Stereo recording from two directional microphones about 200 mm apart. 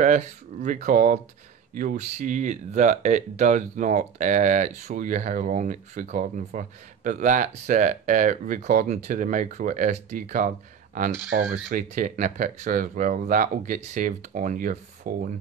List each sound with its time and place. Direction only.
0.0 s speech: 35° right (ahead or behind)